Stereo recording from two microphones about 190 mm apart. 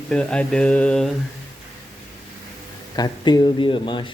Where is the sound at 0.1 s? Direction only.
5° left (ahead or behind).